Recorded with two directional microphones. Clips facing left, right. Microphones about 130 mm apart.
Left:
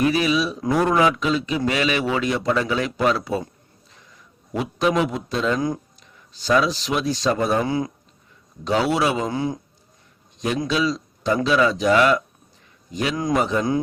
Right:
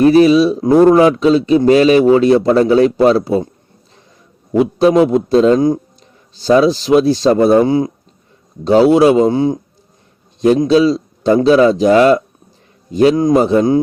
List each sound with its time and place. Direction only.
0.0 s a man's voice: 35° right (ahead or behind)
4.5 s a man's voice: 35° right (ahead or behind)
10.6 s a man's voice: 35° right (ahead or behind)